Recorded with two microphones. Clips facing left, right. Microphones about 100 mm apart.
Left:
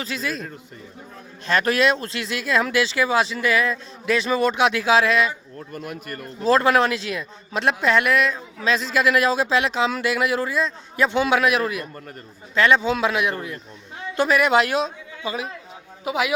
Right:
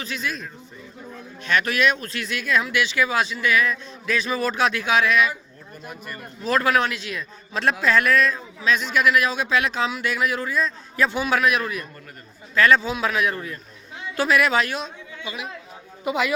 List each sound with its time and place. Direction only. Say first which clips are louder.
0.0 s speech: left 2 dB; 30° left (ahead or behind)
1.5 s a man's voice: left 2 dB; 35° left (ahead or behind)
5.5 s speech: left 6 dB; 70° left (ahead or behind)
6.4 s a man's voice: left 4 dB; 30° left (ahead or behind)
14.8 s a man's voice: left 5 dB; 35° left (ahead or behind)
16.0 s a woman's voice: even; 10° left (ahead or behind)